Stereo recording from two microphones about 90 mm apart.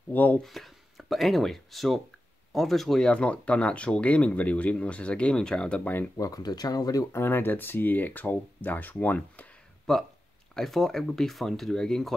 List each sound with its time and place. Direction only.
0.1 s speech: 20° left (ahead or behind)
0.4 s speech: centre (ahead or behind)
6.1 s speech: 40° left (ahead or behind)
7.2 s speech: 25° left (ahead or behind)
9.9 s speech: 5° left (ahead or behind)